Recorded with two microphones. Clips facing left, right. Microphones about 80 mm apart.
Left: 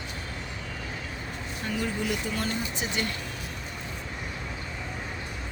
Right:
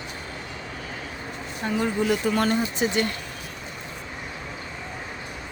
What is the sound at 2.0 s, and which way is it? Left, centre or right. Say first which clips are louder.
Speech: right 8 dB; right.